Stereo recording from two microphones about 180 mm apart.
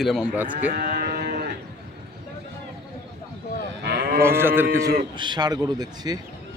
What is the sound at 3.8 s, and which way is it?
Livestock, 60° right (ahead or behind).